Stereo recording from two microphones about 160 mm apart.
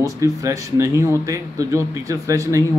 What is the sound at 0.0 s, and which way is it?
A man's voice, 20° right (ahead or behind).